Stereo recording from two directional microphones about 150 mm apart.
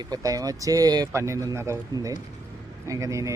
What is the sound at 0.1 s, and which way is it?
Speech, 25° right (ahead or behind).